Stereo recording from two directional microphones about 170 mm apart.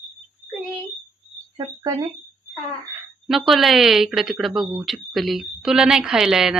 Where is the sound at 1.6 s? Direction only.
25° right (ahead or behind).